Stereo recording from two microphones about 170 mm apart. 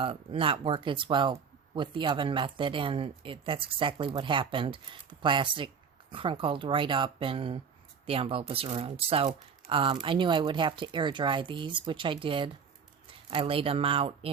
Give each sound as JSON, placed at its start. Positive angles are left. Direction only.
{"t": 0.0, "sound": "speech", "side_deg": -35}